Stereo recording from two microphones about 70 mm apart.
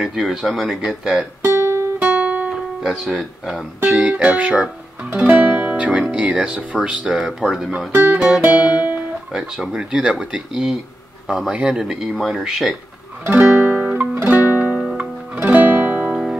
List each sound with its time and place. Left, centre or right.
0.0 s speech: centre
1.5 s music: right
2.0 s music: centre
2.5 s speech: centre
3.8 s speech: centre
7.2 s speech: centre
7.9 s music: right
8.7 s guitar: right
9.3 s speech: centre
12.4 s speech: centre
13.3 s music: centre
16.1 s music: centre